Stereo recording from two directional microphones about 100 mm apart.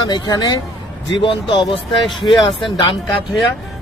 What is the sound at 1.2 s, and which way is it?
Speech, 55° left (ahead or behind).